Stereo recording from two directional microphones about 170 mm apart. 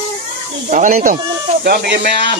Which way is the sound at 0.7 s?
50° right (ahead or behind).